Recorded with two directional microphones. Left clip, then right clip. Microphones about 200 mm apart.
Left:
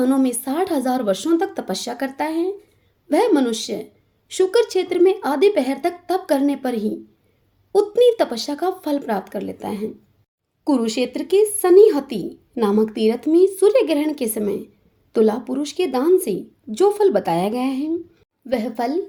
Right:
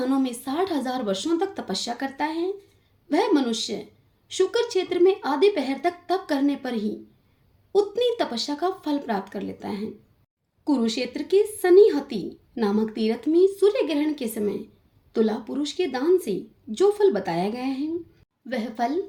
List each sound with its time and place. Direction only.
0.0 s a woman's voice: 45° left (ahead or behind)